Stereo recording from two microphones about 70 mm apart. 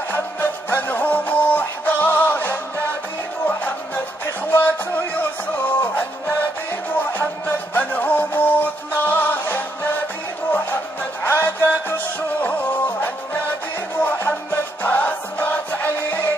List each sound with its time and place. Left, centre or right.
0.1 s music: left
11.2 s music: left